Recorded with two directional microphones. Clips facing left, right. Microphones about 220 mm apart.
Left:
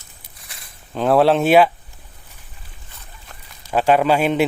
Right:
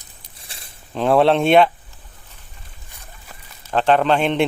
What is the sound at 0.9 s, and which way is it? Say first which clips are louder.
Speech: even; centre (ahead or behind).